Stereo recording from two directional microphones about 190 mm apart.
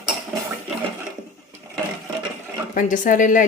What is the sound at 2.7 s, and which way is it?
Speech, 45° left (ahead or behind).